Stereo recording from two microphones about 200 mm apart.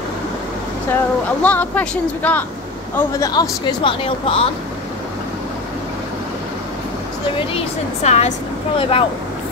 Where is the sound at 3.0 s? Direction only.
20° left (ahead or behind).